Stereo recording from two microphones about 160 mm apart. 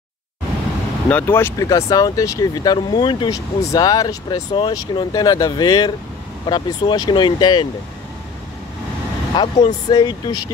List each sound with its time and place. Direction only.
1.0 s speech: 10° left (ahead or behind); by 7.6 s 30° left (ahead or behind)
9.3 s speech: 30° left (ahead or behind)